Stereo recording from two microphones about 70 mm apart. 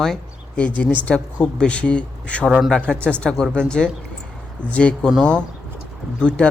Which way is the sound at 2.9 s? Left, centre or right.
Right.